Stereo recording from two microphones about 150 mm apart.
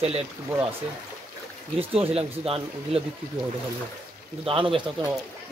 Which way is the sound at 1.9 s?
40° right (ahead or behind).